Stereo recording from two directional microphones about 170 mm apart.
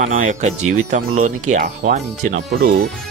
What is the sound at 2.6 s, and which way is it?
Speech, 70° right (ahead or behind).